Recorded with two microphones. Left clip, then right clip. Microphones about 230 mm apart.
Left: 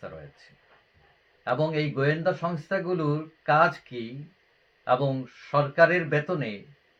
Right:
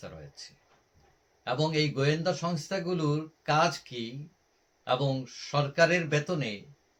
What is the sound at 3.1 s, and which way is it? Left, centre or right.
A man's voice, centre.